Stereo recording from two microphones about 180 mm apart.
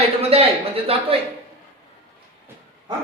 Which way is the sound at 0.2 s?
35° right (ahead or behind).